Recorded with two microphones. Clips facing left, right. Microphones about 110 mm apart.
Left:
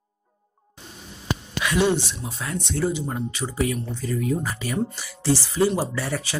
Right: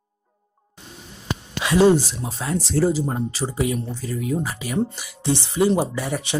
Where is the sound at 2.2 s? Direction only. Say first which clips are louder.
Right 4 dB; 30° right (ahead or behind).